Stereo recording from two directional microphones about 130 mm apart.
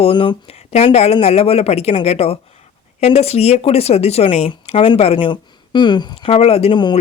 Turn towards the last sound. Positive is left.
turn(degrees=40)  # may be behind; listen again after turning